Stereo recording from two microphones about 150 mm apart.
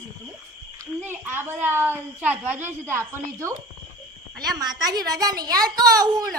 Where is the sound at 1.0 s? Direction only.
15° right (ahead or behind).